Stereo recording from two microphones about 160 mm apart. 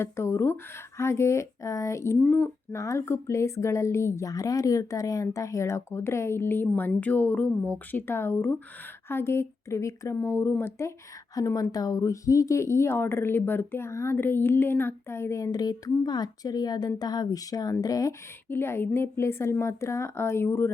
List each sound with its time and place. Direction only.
0.0 s speech: 15° left (ahead or behind)